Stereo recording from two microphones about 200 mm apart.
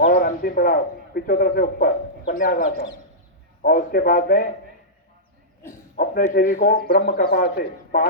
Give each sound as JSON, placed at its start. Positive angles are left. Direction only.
{"t": 0.0, "sound": "a man's voice", "side_deg": 50}
{"t": 6.0, "sound": "a man's voice", "side_deg": 45}